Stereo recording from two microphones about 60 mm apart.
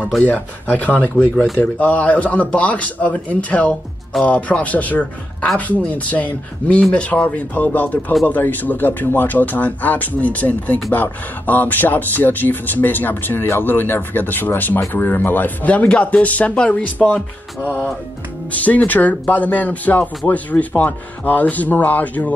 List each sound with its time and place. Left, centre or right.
0.2 s speech: left
18.5 s speech: left